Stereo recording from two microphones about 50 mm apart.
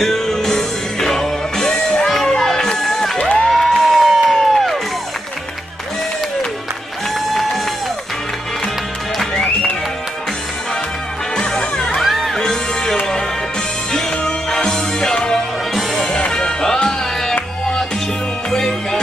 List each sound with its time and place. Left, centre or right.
0.0 s music: centre
3.2 s music: centre
3.4 s music: centre
9.2 s music: centre
11.3 s music: centre
12.4 s music: centre